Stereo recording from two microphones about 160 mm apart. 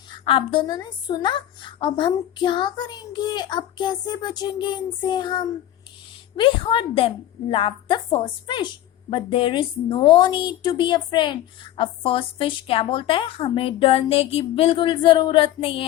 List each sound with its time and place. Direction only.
0.3 s a woman's voice: 30° left (ahead or behind)